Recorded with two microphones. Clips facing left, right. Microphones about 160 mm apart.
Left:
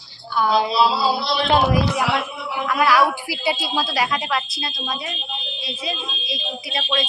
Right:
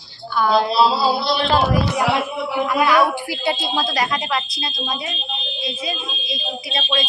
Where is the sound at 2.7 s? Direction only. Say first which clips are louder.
Even; centre (ahead or behind).